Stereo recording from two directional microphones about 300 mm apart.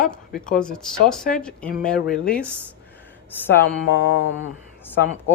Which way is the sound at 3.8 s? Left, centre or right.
Left.